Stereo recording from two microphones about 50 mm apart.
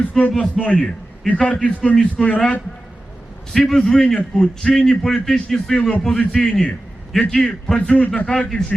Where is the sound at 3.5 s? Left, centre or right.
Centre; by 8.1 s left.